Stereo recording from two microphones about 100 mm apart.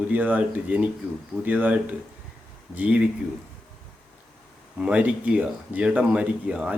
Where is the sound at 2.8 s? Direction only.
15° right (ahead or behind).